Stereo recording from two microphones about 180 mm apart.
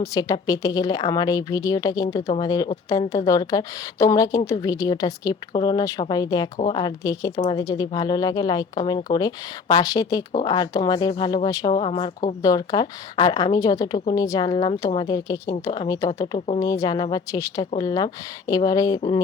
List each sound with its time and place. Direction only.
0.0 s speech: 20° left (ahead or behind)
6.6 s speech: 35° left (ahead or behind)
6.8 s speech: 20° left (ahead or behind)
12.4 s speech: 20° left (ahead or behind)